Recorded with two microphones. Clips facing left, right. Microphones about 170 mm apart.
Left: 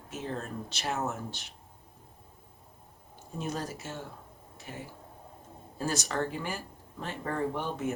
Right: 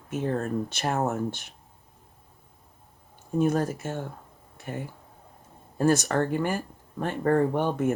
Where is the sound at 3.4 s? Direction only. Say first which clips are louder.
Right 11 dB; 55° right (ahead or behind).